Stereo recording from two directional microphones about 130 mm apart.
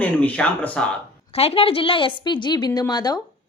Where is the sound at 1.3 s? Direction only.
50° left (ahead or behind).